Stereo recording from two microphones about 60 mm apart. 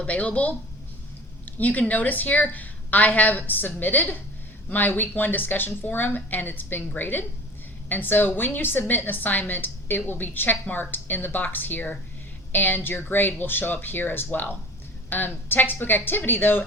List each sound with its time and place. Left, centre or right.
0.0 s a woman's voice: left